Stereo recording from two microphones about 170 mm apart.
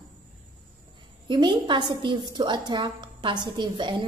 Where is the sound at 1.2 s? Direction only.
30° right (ahead or behind).